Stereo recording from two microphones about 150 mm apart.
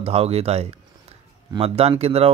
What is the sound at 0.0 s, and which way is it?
Speech, 40° right (ahead or behind).